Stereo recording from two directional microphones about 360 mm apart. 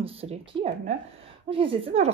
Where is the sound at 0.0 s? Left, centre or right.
Centre.